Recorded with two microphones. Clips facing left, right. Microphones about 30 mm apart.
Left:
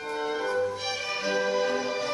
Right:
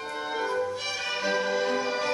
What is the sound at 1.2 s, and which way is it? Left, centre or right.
Music, centre.